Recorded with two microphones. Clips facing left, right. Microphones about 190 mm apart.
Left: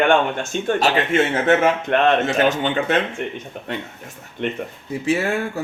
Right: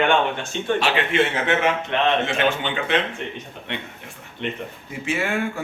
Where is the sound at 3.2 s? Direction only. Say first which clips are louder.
Left 4 dB; 55° left (ahead or behind).